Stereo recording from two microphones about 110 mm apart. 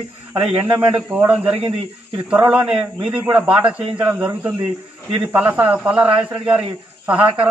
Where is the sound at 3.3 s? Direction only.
10° right (ahead or behind).